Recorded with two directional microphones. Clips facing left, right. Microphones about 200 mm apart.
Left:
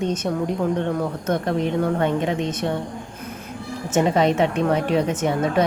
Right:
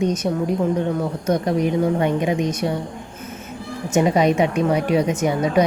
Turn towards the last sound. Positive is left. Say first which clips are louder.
# right 2 dB
turn(degrees=-10)  # may be behind; listen again after turning